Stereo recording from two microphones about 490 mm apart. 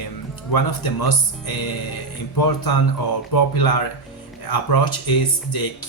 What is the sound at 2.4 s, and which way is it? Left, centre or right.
Speech, left.